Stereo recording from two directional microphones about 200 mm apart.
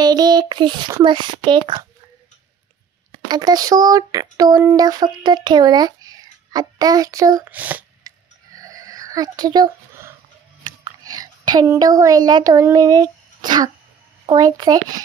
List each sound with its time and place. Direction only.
0.0 s speech: 20° right (ahead or behind)
3.3 s speech: 20° right (ahead or behind)
8.0 s a sound: 20° right (ahead or behind)
10.8 s speech: 20° right (ahead or behind)